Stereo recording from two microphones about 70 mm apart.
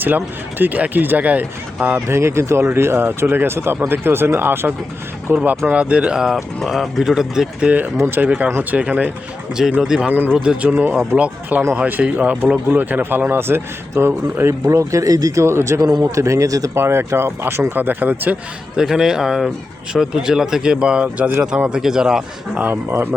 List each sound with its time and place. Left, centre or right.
0.6 s speech: right
2.1 s speech: right
5.7 s speech: centre
7.9 s speech: right
8.2 s speech: right
9.8 s speech: centre
10.1 s speech: right
10.3 s speech: centre; by 14.5 s right
14.7 s speech: right
15.4 s speech: right
16.7 s speech: right
18.8 s speech: centre
21.7 s speech: centre